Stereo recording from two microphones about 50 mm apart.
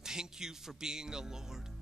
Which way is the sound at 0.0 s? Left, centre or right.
Centre.